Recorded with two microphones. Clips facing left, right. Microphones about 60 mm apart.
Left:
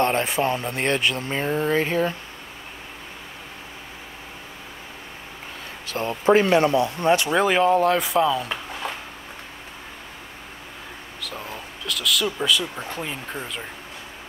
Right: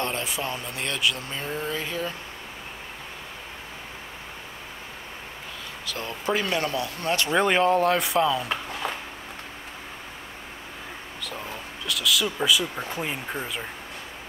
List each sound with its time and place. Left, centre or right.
0.0 s speech: left
5.9 s speech: left
7.3 s a man's voice: centre
11.1 s speech: centre